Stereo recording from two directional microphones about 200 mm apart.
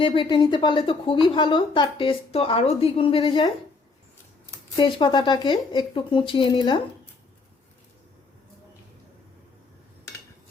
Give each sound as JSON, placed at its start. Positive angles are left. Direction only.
{"t": 0.0, "sound": "a woman's voice", "side_deg": 25}
{"t": 4.8, "sound": "a woman's voice", "side_deg": 25}